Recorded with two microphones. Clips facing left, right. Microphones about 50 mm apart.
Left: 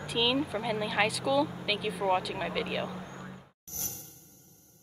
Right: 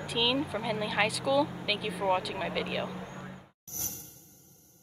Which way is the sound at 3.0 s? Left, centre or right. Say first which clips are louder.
Right 1 dB; centre.